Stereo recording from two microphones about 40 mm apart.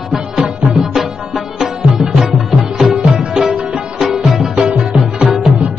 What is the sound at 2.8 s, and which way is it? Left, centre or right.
Music, centre.